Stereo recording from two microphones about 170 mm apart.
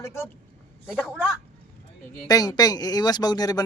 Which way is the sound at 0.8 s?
5° right (ahead or behind).